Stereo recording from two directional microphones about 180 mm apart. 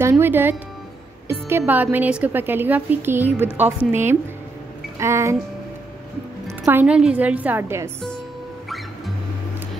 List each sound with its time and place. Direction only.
0.1 s a woman's voice: 10° right (ahead or behind)
6.4 s a woman's voice: 15° right (ahead or behind)
8.6 s music: centre (ahead or behind)